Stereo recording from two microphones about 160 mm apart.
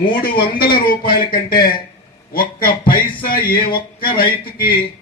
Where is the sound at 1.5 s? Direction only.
65° left (ahead or behind).